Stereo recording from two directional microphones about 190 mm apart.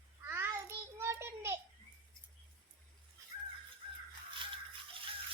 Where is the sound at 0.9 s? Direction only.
15° right (ahead or behind).